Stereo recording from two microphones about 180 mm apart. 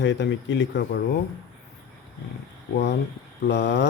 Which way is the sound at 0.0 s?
75° left (ahead or behind).